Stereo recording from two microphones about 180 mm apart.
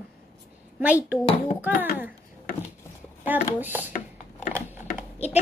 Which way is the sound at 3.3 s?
10° right (ahead or behind).